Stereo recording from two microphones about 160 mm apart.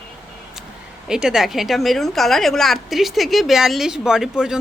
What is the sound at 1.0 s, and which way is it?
A woman's voice, 5° right (ahead or behind).